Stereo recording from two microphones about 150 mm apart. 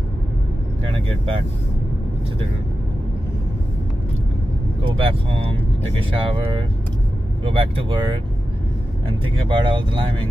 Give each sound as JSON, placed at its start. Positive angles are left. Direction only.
{"t": 4.8, "sound": "speech", "side_deg": -35}